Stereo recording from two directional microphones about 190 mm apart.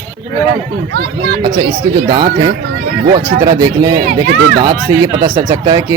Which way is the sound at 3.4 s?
20° right (ahead or behind).